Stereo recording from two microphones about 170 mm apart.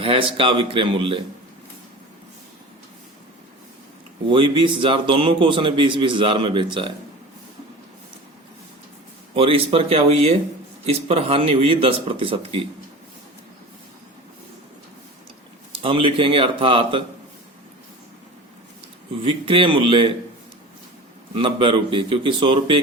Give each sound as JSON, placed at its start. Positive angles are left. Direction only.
{"t": 0.0, "sound": "a man's voice", "side_deg": -30}
{"t": 4.3, "sound": "a man's voice", "side_deg": -30}
{"t": 9.3, "sound": "a man's voice", "side_deg": -35}
{"t": 15.8, "sound": "a man's voice", "side_deg": -30}
{"t": 19.2, "sound": "a man's voice", "side_deg": -30}
{"t": 21.3, "sound": "a man's voice", "side_deg": -30}